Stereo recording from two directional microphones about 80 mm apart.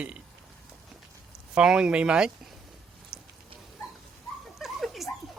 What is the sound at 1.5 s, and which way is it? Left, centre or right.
Speech, centre.